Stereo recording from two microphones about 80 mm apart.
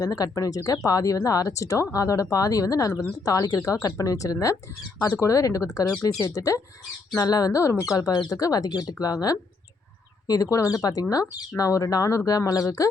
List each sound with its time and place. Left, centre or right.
0.0 s speech: left
7.9 s speech: left